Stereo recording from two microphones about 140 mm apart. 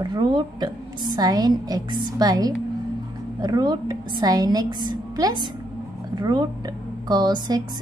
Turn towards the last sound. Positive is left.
turn(degrees=-30)  # may be behind; listen again after turning